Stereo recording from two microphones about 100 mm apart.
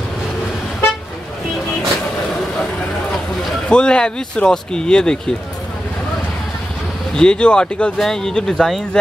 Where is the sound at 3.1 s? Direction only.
5° left (ahead or behind).